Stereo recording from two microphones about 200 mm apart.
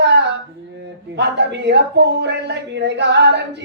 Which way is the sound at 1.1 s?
60° right (ahead or behind).